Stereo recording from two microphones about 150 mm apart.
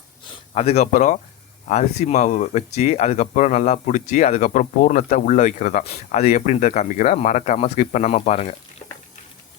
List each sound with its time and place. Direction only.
0.5 s speech: 45° left (ahead or behind)
0.9 s speech: 60° left (ahead or behind)
1.6 s speech: 45° left (ahead or behind)